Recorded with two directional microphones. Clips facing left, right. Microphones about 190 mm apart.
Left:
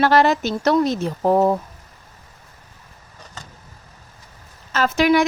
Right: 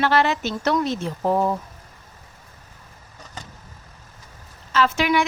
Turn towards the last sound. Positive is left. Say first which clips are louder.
# left 3 dB
turn(degrees=40)  # may be behind; listen again after turning